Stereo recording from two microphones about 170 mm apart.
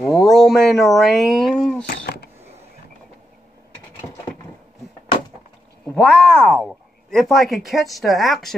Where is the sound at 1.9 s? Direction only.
70° left (ahead or behind).